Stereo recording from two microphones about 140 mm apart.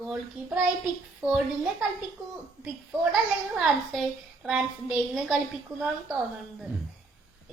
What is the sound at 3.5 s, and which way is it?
Speech, centre (ahead or behind).